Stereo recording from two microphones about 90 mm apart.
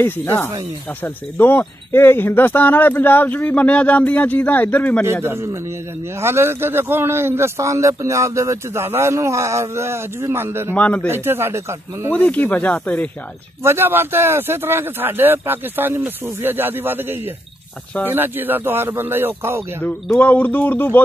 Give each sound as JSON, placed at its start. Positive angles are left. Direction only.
{"t": 0.0, "sound": "speech", "side_deg": 25}
{"t": 5.0, "sound": "a man's voice", "side_deg": -30}
{"t": 10.7, "sound": "speech", "side_deg": 15}
{"t": 11.1, "sound": "a man's voice", "side_deg": -25}
{"t": 12.1, "sound": "speech", "side_deg": 15}
{"t": 13.7, "sound": "a man's voice", "side_deg": -25}
{"t": 20.2, "sound": "speech", "side_deg": 20}